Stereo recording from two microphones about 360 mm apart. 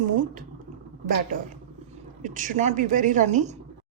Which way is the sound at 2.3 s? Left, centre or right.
Right.